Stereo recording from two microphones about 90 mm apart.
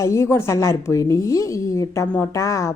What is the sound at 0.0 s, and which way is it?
A woman's voice, 35° left (ahead or behind).